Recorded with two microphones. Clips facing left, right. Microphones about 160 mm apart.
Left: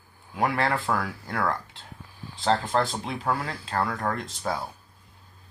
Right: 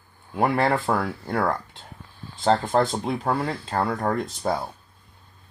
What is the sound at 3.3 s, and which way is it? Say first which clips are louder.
Speech: right 1 dB; 30° right (ahead or behind).